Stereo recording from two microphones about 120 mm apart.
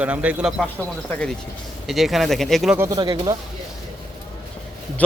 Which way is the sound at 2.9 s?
35° right (ahead or behind).